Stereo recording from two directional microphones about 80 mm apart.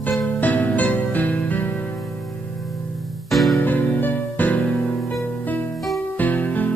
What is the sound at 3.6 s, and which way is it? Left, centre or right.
Music, left.